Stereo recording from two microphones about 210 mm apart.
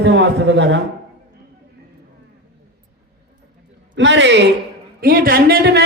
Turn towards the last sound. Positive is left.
turn(degrees=-45)  # may be behind; listen again after turning